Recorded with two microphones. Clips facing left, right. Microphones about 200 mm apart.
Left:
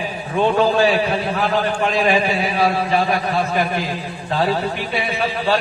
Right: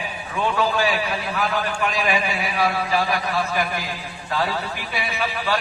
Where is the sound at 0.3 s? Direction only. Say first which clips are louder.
Left 6 dB; 30° left (ahead or behind).